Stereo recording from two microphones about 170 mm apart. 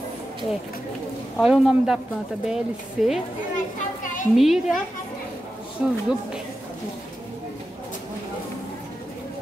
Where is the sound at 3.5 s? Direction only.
50° left (ahead or behind).